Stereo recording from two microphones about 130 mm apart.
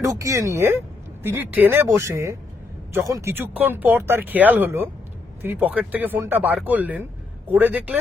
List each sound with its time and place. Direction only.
0.0 s speech: 25° right (ahead or behind)